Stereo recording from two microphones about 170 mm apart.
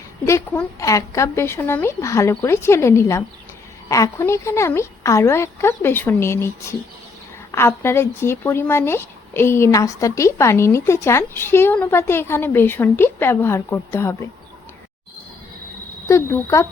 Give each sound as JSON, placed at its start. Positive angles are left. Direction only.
{"t": 0.3, "sound": "speech", "side_deg": 15}
{"t": 16.0, "sound": "speech", "side_deg": 15}